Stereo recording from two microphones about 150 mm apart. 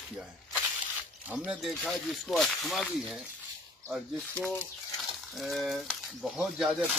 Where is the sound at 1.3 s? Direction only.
5° right (ahead or behind).